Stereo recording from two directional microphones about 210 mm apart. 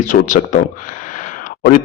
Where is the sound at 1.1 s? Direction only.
35° left (ahead or behind).